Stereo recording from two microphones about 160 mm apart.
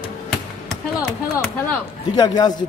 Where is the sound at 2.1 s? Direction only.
25° left (ahead or behind).